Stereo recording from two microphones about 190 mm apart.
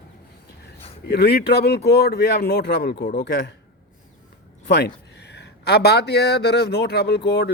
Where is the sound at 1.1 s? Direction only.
60° left (ahead or behind).